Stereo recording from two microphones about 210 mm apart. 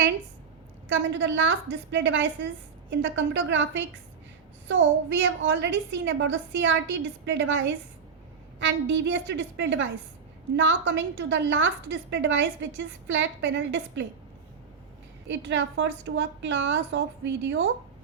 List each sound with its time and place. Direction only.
0.9 s a woman's voice: 60° right (ahead or behind)
15.3 s a woman's voice: 60° right (ahead or behind)